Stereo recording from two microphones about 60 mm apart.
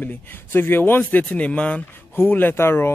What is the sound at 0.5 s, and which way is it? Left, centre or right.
Speech, left.